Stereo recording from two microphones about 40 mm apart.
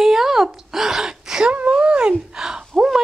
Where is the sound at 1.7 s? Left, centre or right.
Right.